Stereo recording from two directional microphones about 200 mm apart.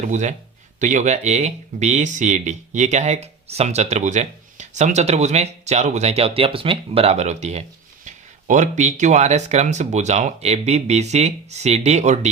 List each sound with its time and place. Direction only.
0.0 s speech: 40° right (ahead or behind)